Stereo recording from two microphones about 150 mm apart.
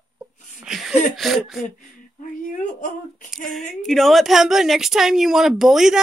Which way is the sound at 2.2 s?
60° left (ahead or behind).